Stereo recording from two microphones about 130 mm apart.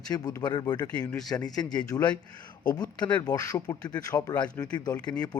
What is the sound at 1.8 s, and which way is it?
A man's voice, 30° left (ahead or behind).